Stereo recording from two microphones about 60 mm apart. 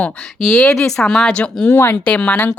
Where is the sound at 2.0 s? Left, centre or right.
Centre.